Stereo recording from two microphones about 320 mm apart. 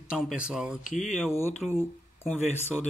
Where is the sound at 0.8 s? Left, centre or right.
Left.